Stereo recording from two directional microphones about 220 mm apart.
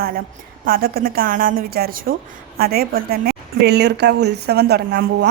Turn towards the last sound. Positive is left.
turn(degrees=-50)  # may be behind; listen again after turning